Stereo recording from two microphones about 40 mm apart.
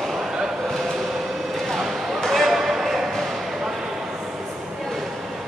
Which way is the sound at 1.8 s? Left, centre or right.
Centre.